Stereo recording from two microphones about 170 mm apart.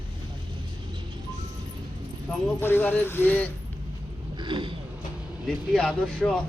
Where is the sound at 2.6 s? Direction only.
10° left (ahead or behind).